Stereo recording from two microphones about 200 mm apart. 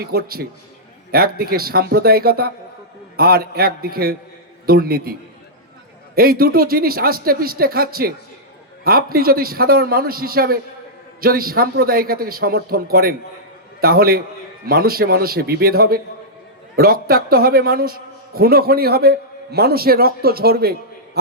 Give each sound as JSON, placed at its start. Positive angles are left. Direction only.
{"t": 0.0, "sound": "a man's voice", "side_deg": -50}
{"t": 6.1, "sound": "a man's voice", "side_deg": -50}